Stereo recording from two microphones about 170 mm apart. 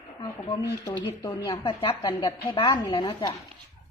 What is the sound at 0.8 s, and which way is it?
A woman's voice, 25° left (ahead or behind).